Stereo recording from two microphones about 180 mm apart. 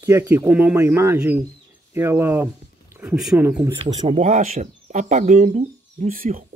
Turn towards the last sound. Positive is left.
turn(degrees=-50)  # may be behind; listen again after turning